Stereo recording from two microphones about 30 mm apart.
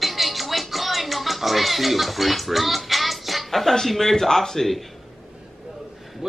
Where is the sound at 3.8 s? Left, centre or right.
Centre.